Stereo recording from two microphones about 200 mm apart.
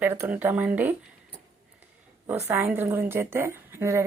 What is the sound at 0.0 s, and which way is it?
Speech, 10° right (ahead or behind).